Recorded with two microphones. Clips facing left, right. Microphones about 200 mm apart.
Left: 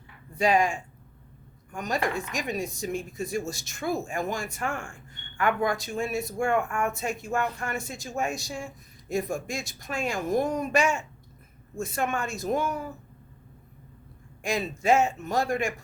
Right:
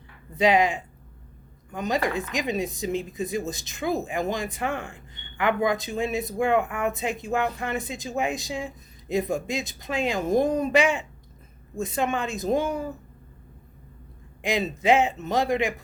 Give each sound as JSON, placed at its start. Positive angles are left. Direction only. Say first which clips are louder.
{"t": 0.4, "sound": "speech", "louder": "right 3 dB", "side_deg": -20}
{"t": 14.4, "sound": "speech", "louder": "right 3 dB", "side_deg": -20}